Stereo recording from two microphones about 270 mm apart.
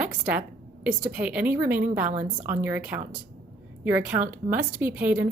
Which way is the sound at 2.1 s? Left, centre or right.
Right.